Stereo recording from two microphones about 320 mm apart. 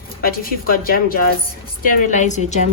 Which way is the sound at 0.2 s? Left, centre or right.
Left.